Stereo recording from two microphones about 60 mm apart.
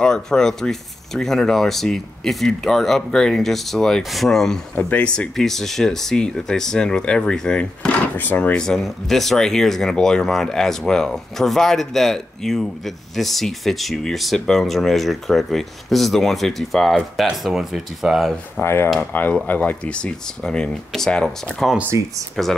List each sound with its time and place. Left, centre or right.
0.0 s speech: centre
4.7 s speech: left
5.3 s speech: centre
8.2 s speech: left
8.5 s speech: centre
18.6 s speech: left
18.9 s speech: left; by 22.6 s centre